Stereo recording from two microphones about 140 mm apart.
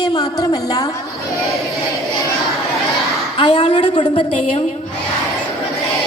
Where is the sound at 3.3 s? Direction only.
50° left (ahead or behind).